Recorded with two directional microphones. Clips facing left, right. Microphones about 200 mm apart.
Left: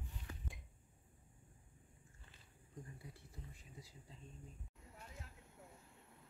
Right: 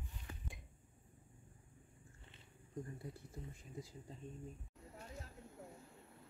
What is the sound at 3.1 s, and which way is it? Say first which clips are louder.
Speech: right 6 dB; 50° right (ahead or behind).